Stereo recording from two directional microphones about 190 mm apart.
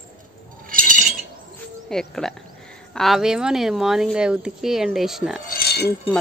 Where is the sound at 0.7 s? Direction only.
45° right (ahead or behind).